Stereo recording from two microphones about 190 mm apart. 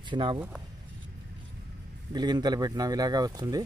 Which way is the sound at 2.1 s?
20° right (ahead or behind).